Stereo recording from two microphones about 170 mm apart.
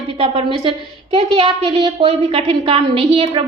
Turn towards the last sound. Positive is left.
turn(degrees=-35)  # may be behind; listen again after turning